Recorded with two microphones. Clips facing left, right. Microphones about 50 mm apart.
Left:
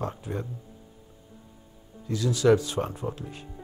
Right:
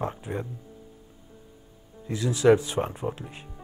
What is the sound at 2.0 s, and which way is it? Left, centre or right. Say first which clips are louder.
Speech: right 1 dB; right.